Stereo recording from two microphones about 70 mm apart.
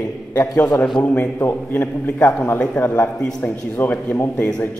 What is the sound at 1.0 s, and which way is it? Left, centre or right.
A man's voice, left.